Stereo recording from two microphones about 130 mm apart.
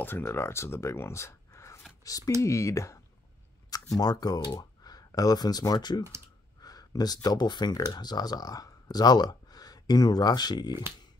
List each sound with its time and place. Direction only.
0.0 s speech: 15° left (ahead or behind); by 10.8 s 35° left (ahead or behind)